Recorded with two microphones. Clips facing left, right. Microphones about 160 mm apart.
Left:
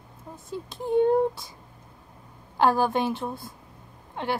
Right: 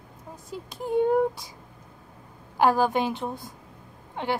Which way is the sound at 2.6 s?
15° right (ahead or behind).